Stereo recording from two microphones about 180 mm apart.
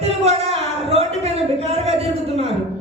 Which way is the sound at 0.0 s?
35° right (ahead or behind).